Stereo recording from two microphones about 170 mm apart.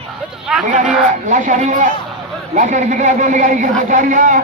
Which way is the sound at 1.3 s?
50° right (ahead or behind).